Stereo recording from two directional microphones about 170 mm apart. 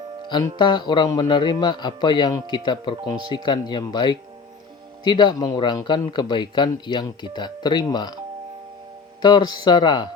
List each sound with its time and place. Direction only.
0.6 s speech: 25° left (ahead or behind)
9.2 s speech: 25° left (ahead or behind)